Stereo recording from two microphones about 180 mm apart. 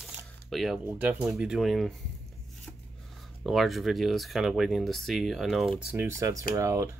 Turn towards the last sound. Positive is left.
turn(degrees=-15)  # may be behind; listen again after turning